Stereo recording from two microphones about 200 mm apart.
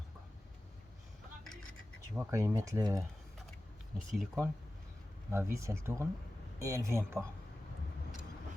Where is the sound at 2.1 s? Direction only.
15° right (ahead or behind).